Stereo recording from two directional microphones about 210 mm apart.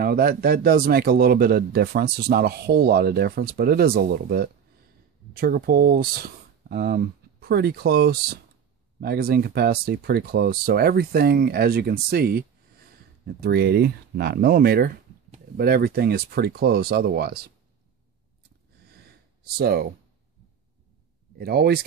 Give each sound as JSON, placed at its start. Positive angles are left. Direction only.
{"t": 0.0, "sound": "speech", "side_deg": -45}
{"t": 19.5, "sound": "speech", "side_deg": -50}
{"t": 21.4, "sound": "speech", "side_deg": -50}